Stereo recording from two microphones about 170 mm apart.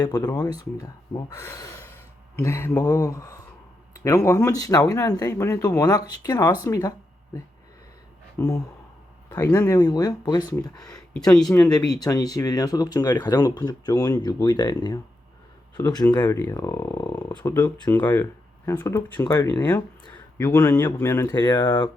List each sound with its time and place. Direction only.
0.0 s speech: 20° left (ahead or behind)
1.4 s speech: 15° left (ahead or behind)
8.4 s speech: 15° left (ahead or behind)
10.9 s speech: 5° left (ahead or behind)
11.6 s speech: 25° left (ahead or behind)